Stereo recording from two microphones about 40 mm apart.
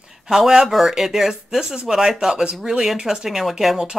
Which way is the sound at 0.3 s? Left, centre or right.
Centre.